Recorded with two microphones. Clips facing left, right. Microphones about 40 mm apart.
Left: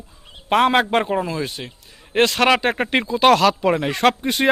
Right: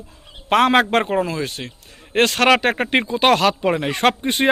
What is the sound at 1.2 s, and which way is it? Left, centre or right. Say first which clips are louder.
Speech: right 1 dB; right.